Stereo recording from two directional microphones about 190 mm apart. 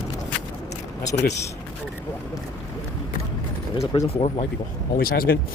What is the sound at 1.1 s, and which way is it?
Speech, 65° left (ahead or behind).